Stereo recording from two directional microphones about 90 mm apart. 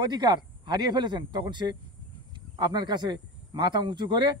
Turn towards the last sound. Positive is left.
turn(degrees=-55)  # may be behind; listen again after turning